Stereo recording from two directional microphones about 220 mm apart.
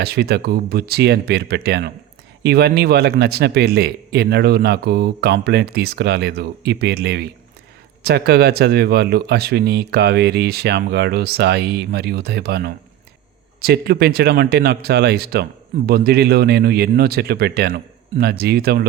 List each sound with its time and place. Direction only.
0.0 s a man's voice: 45° right (ahead or behind)